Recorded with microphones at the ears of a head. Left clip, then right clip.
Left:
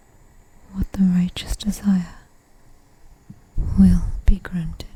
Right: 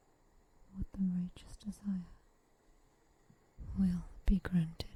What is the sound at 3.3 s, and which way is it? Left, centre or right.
Whispering, left.